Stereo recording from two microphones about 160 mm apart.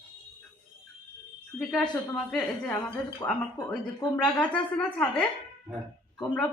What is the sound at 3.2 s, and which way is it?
Speech, 25° left (ahead or behind).